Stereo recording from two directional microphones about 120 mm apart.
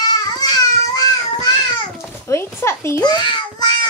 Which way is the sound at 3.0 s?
35° left (ahead or behind).